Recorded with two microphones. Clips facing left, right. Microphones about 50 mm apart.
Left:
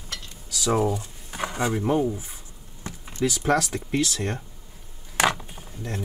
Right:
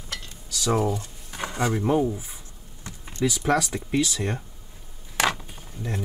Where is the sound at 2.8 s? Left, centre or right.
Centre.